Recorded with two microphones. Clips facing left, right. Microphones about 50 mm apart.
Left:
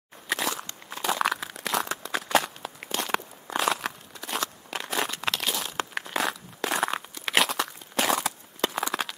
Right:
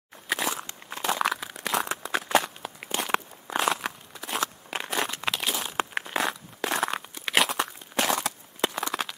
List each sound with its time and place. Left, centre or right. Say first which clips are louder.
0.3 s walk: even; centre
1.0 s crumpling: even; centre
1.9 s a sound: right 2 dB; centre
2.3 s walk: left 1 dB; centre
3.1 s crunch: right 3 dB; centre
3.6 s crumpling: left 1 dB; centre
5.7 s crunch: right 2 dB; right
6.0 s crunch: even; centre
7.2 s a sound: even; centre